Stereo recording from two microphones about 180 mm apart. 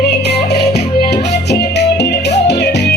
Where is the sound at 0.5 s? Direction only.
65° left (ahead or behind).